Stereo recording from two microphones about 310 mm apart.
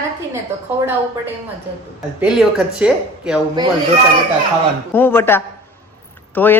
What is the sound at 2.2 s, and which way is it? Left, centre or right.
Speech, centre.